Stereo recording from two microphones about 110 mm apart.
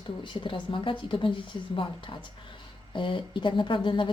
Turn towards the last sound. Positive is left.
turn(degrees=50)  # may be behind; listen again after turning